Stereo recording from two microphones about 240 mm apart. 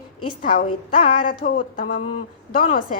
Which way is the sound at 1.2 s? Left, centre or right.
Left.